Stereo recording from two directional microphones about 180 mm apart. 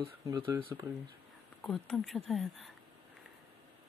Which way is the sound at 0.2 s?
20° right (ahead or behind).